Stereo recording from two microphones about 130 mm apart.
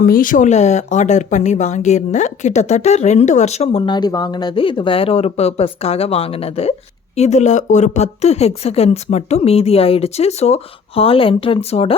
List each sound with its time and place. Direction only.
0.0 s speech: 90° left; by 6.7 s 50° left (ahead or behind)
7.2 s speech: 65° left (ahead or behind)